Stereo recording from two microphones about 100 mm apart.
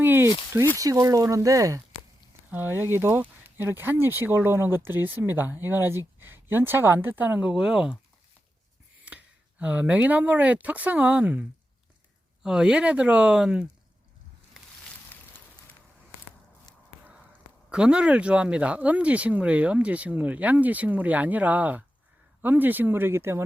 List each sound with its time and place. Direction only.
0.0 s a sound: 20° right (ahead or behind)
0.8 s speech: 35° right (ahead or behind)
2.5 s speech: 20° right (ahead or behind)
9.0 s speech: 15° right (ahead or behind)
17.7 s speech: 10° right (ahead or behind)